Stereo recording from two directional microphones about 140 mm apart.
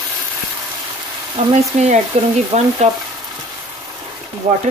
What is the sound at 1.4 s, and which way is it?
Frying, 55° right (ahead or behind).